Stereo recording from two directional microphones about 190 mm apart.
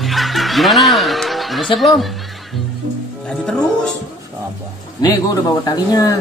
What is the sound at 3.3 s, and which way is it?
Speech, 5° left (ahead or behind).